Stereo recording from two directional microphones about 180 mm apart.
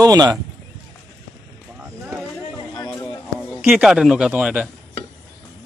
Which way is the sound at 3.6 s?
5° right (ahead or behind).